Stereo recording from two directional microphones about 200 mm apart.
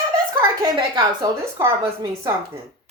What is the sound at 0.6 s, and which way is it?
A woman's voice, 20° right (ahead or behind).